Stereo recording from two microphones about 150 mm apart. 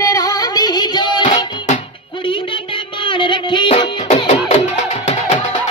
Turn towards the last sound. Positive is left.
turn(degrees=50)  # may be behind; listen again after turning